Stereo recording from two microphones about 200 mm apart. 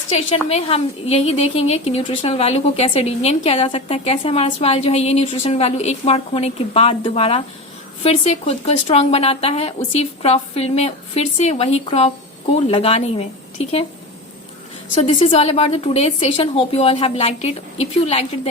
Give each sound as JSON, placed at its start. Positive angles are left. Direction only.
{"t": 0.1, "sound": "a woman's voice", "side_deg": 30}
{"t": 14.9, "sound": "a woman's voice", "side_deg": 30}